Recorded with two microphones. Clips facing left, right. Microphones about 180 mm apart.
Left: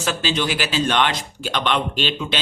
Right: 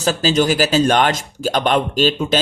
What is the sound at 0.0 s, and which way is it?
Speech, 40° right (ahead or behind).